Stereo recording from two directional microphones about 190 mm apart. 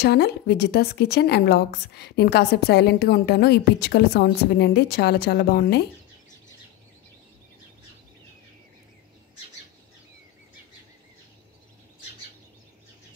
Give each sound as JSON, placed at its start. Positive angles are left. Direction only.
{"t": 0.0, "sound": "a woman's voice", "side_deg": 60}